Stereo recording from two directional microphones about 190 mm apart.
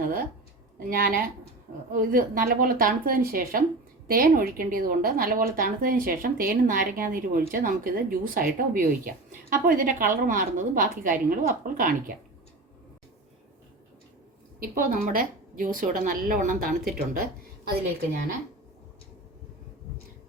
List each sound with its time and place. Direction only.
0.0 s a sound: 45° right (ahead or behind)
0.8 s a woman's voice: 50° right (ahead or behind)
14.6 s a woman's voice: 50° right (ahead or behind)